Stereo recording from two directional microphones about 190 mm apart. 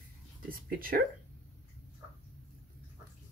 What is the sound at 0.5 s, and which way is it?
Speech, 50° right (ahead or behind).